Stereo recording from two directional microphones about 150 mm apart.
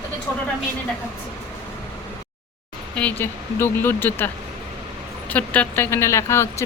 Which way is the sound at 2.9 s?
10° left (ahead or behind).